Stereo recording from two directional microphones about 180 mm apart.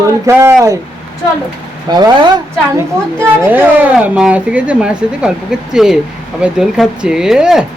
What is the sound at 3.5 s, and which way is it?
Speech, 10° right (ahead or behind).